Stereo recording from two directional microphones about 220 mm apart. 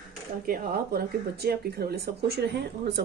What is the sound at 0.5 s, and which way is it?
Speech, 45° right (ahead or behind).